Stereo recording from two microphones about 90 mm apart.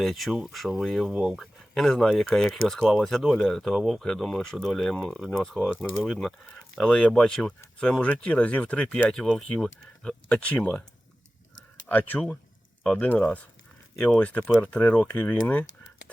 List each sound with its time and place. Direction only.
0.0 s speech: centre (ahead or behind)
11.9 s speech: 20° left (ahead or behind)